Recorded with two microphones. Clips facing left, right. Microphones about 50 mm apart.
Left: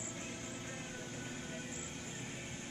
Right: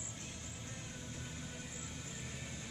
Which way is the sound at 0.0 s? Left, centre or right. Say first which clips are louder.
Left 5 dB; left.